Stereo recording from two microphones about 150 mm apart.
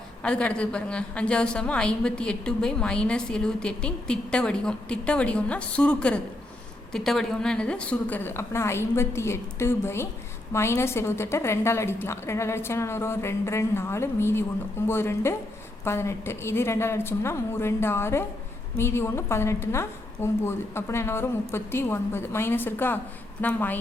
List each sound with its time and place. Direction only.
0.2 s a woman's voice: 5° left (ahead or behind)